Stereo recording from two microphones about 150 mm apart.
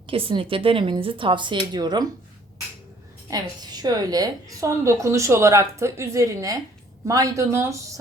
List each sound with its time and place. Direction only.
0.1 s speech: 35° right (ahead or behind)
3.2 s a woman's voice: 25° right (ahead or behind)